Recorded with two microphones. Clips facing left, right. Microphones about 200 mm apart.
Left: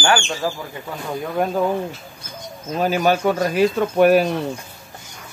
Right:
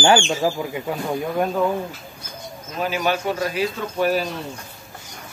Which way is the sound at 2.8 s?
45° left (ahead or behind).